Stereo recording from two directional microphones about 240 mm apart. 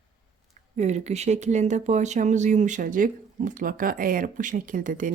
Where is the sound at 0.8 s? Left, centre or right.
Right.